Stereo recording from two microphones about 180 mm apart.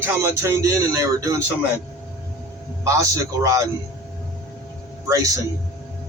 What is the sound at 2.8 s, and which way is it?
Speech, 20° right (ahead or behind).